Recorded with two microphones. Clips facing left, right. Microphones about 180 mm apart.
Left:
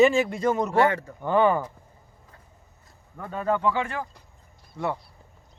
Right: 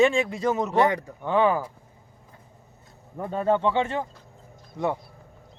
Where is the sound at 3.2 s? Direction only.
25° right (ahead or behind).